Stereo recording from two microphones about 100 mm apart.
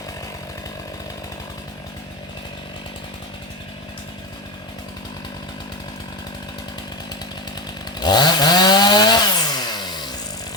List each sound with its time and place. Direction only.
7.9 s chainsaw: 45° left (ahead or behind)